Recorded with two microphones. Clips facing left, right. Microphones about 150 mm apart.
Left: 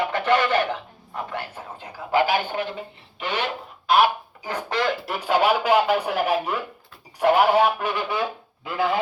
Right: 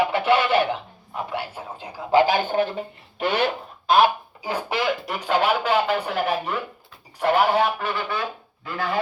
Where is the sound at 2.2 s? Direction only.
40° right (ahead or behind).